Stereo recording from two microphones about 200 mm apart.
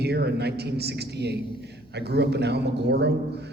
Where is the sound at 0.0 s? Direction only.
55° right (ahead or behind).